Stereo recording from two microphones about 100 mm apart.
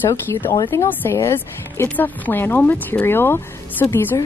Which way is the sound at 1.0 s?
25° left (ahead or behind).